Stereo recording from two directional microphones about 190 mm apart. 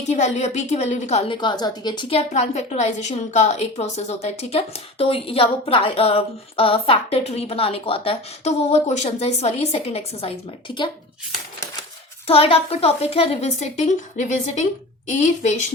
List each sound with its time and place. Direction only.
0.1 s a woman's voice: 35° left (ahead or behind)
12.3 s a woman's voice: 30° left (ahead or behind)